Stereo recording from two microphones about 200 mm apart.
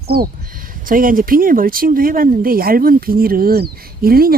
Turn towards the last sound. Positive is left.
turn(degrees=-50)  # may be behind; listen again after turning